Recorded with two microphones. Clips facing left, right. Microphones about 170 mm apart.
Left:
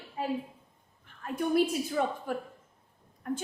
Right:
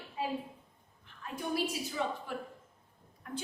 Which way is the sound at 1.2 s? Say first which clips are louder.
Left 8 dB; 55° left (ahead or behind).